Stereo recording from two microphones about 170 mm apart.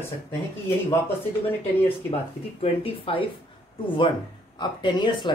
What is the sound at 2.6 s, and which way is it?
Speech, 35° left (ahead or behind).